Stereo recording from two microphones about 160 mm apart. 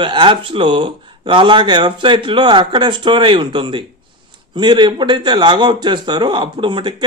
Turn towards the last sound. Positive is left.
turn(degrees=-30)  # may be behind; listen again after turning